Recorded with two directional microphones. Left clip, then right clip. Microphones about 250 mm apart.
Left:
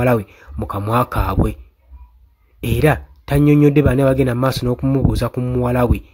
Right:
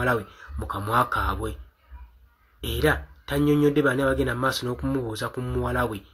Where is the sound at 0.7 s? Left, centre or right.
Left.